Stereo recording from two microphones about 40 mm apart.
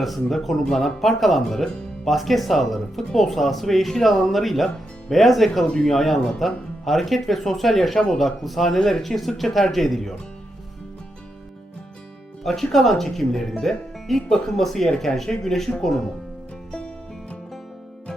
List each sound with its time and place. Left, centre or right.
0.0 s speech: centre
5.6 s a man's voice: centre
5.9 s speech: centre
12.4 s speech: centre